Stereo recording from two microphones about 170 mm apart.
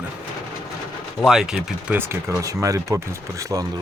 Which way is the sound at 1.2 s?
Centre (ahead or behind).